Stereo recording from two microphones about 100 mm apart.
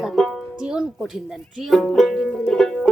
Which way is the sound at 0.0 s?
Centre (ahead or behind).